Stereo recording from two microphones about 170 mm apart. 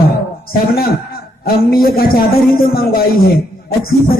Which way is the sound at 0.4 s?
60° left (ahead or behind).